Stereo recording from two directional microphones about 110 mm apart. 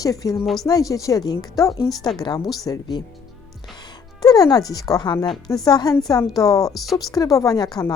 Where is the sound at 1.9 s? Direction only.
5° left (ahead or behind).